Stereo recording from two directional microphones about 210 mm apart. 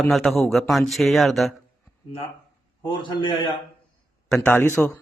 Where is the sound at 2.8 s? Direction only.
20° left (ahead or behind).